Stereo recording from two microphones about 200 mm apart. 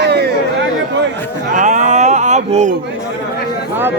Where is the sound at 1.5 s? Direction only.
40° right (ahead or behind).